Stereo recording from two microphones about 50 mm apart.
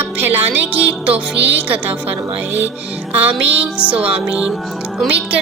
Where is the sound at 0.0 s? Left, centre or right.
Right.